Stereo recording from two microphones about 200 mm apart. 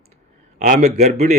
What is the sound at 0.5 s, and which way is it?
Speech, 40° right (ahead or behind).